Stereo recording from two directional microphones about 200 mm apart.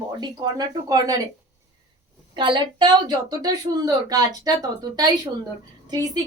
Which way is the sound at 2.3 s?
25° right (ahead or behind).